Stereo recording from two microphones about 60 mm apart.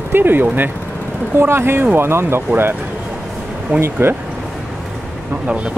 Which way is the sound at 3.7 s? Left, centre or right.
Right.